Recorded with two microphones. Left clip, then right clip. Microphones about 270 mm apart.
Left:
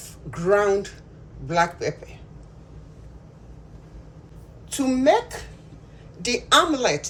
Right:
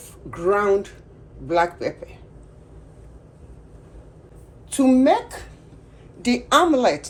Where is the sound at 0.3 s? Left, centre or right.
Right.